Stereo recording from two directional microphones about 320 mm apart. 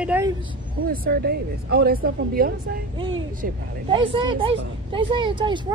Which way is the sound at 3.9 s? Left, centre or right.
Centre.